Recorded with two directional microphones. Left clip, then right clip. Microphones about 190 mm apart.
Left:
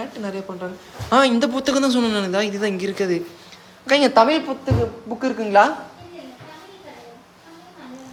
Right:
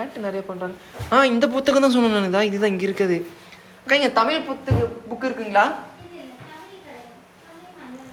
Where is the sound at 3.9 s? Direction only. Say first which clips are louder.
Left 3 dB; 25° left (ahead or behind).